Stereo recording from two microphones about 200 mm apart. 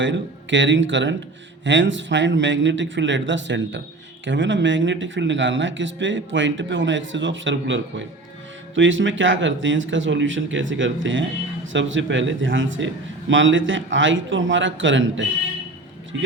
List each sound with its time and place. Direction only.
0.0 s speech: 65° right (ahead or behind)